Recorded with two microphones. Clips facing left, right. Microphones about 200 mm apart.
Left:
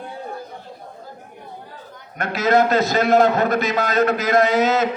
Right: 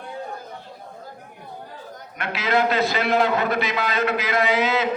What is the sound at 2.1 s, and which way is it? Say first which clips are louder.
A man's voice: left 5 dB; 45° left (ahead or behind).